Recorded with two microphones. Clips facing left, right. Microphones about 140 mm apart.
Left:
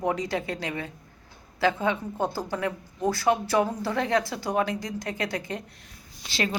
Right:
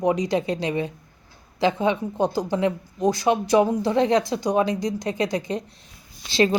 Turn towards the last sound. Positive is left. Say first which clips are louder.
# right 9 dB
turn(degrees=-25)  # may be behind; listen again after turning